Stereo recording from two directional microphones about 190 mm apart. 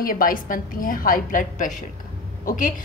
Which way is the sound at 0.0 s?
50° left (ahead or behind).